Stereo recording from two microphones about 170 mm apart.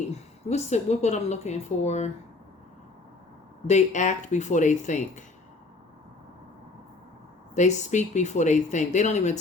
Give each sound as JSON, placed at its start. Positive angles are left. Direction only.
{"t": 0.1, "sound": "a woman's voice", "side_deg": 40}
{"t": 3.7, "sound": "speech", "side_deg": 45}
{"t": 7.5, "sound": "speech", "side_deg": 45}